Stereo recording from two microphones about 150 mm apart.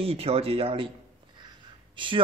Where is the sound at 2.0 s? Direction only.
30° right (ahead or behind).